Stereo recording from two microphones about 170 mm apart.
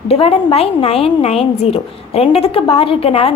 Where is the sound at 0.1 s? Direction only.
35° left (ahead or behind).